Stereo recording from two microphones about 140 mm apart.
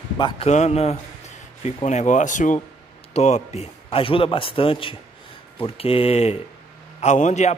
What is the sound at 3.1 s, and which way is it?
A man's voice, 55° left (ahead or behind).